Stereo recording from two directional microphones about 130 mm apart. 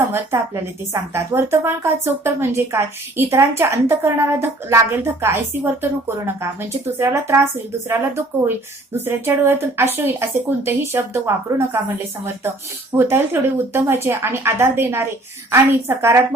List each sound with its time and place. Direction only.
0.1 s a woman's voice: 20° right (ahead or behind)
13.0 s a woman's voice: 20° right (ahead or behind)